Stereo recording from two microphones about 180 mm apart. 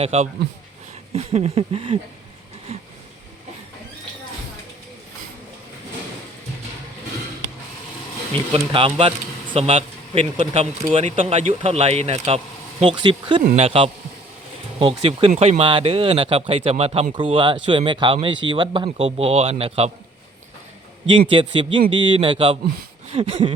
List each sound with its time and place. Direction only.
0.0 s speech: 35° right (ahead or behind)
8.5 s speech: 30° right (ahead or behind)
21.1 s speech: 30° right (ahead or behind)